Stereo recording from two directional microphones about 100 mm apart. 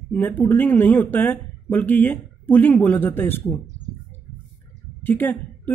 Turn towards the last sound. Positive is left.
turn(degrees=20)  # may be behind; listen again after turning